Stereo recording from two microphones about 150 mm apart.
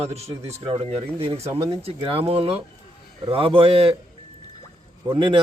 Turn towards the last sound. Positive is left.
turn(degrees=-35)  # may be behind; listen again after turning